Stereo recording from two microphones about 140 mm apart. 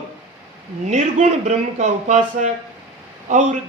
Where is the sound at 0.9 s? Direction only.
60° right (ahead or behind).